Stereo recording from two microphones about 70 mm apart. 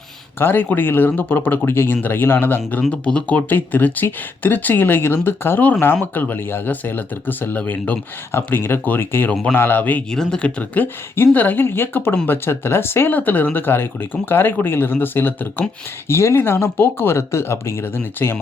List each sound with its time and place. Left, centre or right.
0.3 s speech: left
2.9 s speech: centre
10.1 s speech: centre; by 18.3 s left